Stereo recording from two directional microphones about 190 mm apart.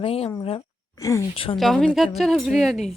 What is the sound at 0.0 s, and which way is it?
Speech, 30° left (ahead or behind).